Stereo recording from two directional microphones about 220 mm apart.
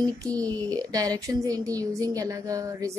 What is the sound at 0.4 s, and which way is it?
A woman's voice, 15° right (ahead or behind).